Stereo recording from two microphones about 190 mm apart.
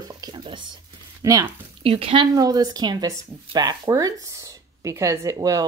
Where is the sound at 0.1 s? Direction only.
20° right (ahead or behind).